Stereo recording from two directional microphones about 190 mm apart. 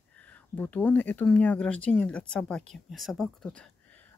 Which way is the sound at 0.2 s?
10° left (ahead or behind).